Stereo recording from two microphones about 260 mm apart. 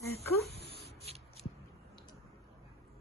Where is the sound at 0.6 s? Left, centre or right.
Left.